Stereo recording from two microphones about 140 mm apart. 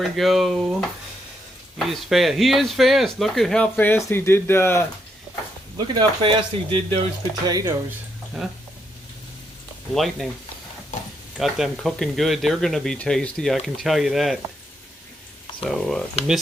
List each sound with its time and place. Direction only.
0.0 s speech: centre (ahead or behind); by 4.9 s 15° left (ahead or behind)
5.7 s speech: 30° right (ahead or behind)
7.4 s speech: 30° right (ahead or behind)
8.4 s speech: centre (ahead or behind)
9.9 s speech: centre (ahead or behind)
11.3 s speech: centre (ahead or behind)
15.6 s speech: centre (ahead or behind)